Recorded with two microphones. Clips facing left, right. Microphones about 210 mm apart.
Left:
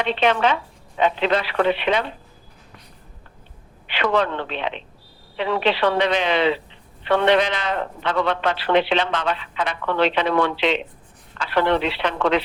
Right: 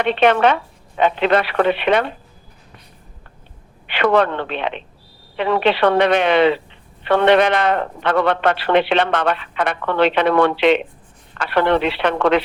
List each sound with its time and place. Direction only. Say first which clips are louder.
0.0 s a woman's voice: right 5 dB; 60° right (ahead or behind)
3.8 s a woman's voice: right 5 dB; 60° right (ahead or behind)